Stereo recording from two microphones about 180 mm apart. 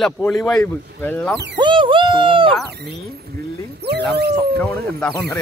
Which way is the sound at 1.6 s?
25° right (ahead or behind).